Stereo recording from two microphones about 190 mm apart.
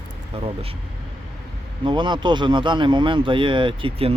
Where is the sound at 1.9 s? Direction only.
25° right (ahead or behind).